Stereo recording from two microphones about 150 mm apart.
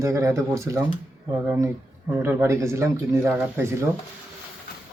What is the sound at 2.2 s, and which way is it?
Speech, 15° right (ahead or behind).